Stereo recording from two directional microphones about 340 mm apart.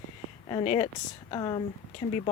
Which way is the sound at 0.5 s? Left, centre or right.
Centre.